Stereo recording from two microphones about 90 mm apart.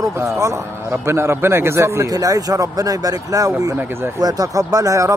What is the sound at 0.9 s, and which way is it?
A man's voice, 30° right (ahead or behind).